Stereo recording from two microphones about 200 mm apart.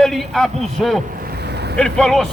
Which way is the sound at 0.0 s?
Centre (ahead or behind).